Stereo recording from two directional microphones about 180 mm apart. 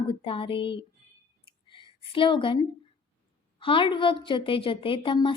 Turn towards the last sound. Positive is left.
turn(degrees=30)  # may be behind; listen again after turning